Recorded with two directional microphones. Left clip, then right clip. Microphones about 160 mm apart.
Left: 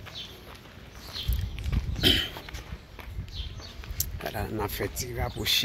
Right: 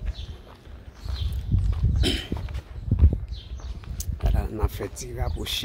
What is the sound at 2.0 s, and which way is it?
Horse, 20° right (ahead or behind).